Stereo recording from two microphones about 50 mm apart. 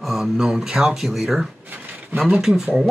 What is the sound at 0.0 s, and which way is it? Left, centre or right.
Speech, centre.